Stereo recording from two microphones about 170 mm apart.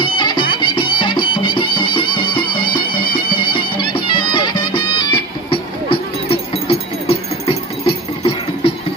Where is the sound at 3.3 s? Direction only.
30° left (ahead or behind).